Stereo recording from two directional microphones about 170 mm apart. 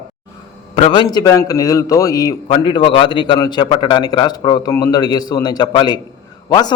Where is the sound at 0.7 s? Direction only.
35° left (ahead or behind).